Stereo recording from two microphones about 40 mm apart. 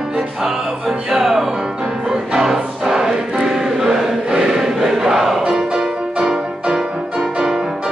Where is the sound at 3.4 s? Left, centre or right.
Centre.